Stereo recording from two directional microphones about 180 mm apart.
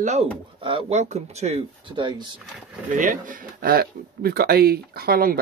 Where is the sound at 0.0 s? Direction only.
35° right (ahead or behind).